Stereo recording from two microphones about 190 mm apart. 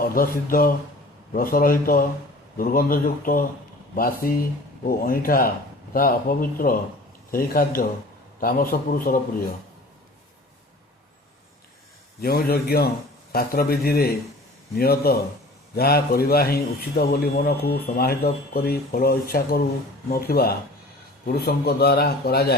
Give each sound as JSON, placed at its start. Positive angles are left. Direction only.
{"t": 0.0, "sound": "a man's voice", "side_deg": 50}
{"t": 12.2, "sound": "a man's voice", "side_deg": 50}